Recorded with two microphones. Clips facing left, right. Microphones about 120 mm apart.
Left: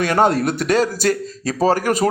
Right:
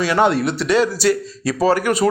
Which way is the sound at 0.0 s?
45° left (ahead or behind).